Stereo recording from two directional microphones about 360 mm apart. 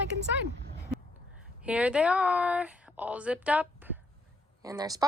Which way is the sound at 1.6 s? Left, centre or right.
Centre.